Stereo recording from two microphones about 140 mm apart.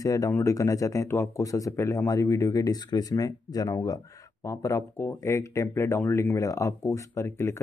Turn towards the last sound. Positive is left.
turn(degrees=20)  # may be behind; listen again after turning